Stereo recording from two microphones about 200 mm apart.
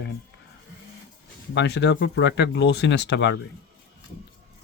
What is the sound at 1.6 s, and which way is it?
Speech, 60° left (ahead or behind).